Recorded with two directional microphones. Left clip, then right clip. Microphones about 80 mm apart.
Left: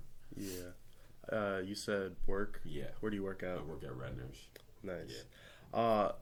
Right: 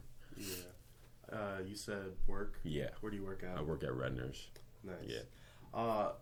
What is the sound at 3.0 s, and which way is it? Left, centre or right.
Speech, left.